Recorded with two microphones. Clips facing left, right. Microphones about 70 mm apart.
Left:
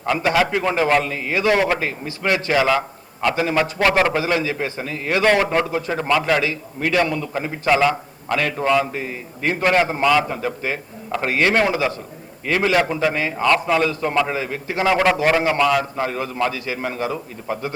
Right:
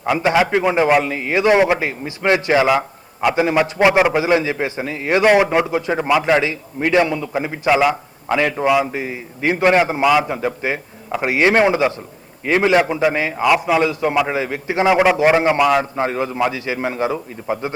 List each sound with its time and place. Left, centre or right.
0.0 s a man's voice: centre